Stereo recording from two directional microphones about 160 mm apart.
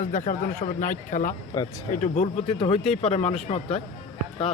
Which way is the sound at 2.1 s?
40° left (ahead or behind).